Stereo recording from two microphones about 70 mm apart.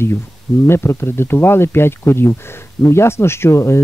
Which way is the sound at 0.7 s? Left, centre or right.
Left.